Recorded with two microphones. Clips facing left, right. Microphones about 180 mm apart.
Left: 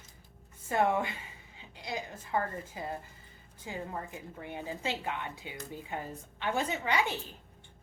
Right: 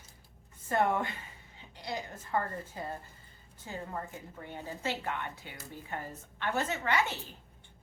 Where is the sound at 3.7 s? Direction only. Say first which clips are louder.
Left 1 dB; 15° left (ahead or behind).